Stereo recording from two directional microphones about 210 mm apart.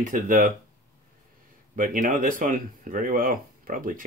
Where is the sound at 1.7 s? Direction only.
40° right (ahead or behind).